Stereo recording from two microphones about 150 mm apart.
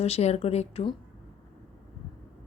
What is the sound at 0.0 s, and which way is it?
Speech, 45° left (ahead or behind).